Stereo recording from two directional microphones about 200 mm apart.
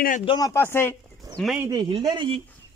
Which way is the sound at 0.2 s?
20° left (ahead or behind).